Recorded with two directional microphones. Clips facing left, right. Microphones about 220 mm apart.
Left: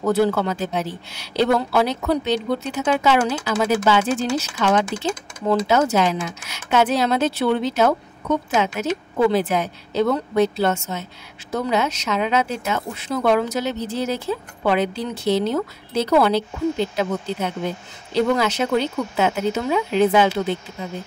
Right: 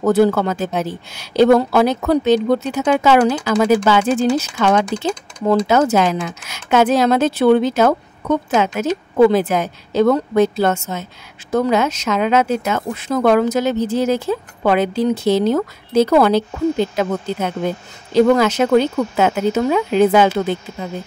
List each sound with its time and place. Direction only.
0.2 s speech: 50° right (ahead or behind)